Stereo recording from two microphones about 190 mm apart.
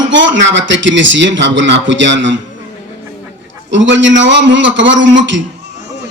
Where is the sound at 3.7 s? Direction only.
75° right (ahead or behind).